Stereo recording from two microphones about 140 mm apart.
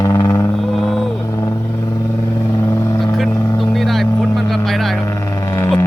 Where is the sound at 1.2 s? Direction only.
20° left (ahead or behind).